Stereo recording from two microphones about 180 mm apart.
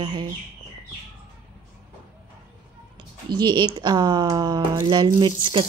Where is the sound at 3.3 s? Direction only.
25° right (ahead or behind).